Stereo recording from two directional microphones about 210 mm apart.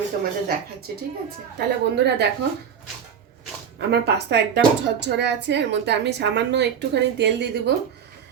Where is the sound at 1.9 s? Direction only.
55° right (ahead or behind).